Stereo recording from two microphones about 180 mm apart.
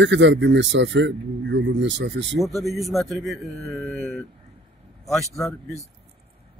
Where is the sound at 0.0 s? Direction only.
90° right.